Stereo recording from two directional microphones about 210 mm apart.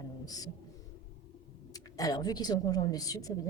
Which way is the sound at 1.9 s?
15° left (ahead or behind).